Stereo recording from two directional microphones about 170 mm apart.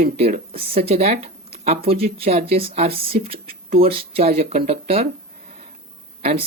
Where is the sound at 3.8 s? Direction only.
35° right (ahead or behind).